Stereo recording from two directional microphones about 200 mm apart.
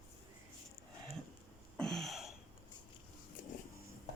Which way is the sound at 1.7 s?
Centre (ahead or behind).